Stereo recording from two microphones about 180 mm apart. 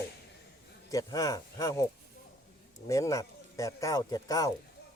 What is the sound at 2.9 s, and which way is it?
Speech, 20° left (ahead or behind).